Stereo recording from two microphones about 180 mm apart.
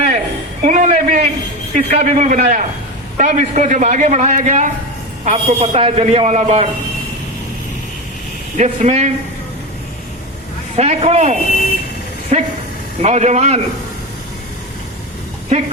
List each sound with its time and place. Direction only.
0.6 s a sound: 45° right (ahead or behind)
1.7 s a man's voice: 40° right (ahead or behind)
8.5 s a man's voice: 40° right (ahead or behind)
10.8 s a man's voice: 35° right (ahead or behind)
15.5 s a man's voice: 40° right (ahead or behind)